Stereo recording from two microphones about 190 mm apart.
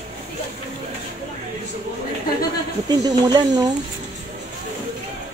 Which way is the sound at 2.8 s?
20° right (ahead or behind).